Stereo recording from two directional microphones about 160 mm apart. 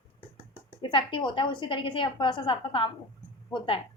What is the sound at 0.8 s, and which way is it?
A woman's voice, 30° left (ahead or behind).